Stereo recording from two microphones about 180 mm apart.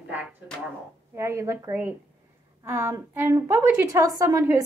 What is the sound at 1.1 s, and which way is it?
A woman's voice, 15° right (ahead or behind).